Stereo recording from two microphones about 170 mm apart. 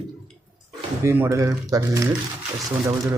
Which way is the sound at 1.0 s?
15° right (ahead or behind).